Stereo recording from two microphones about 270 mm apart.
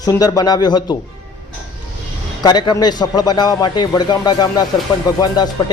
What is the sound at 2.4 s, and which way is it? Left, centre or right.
Speech, centre.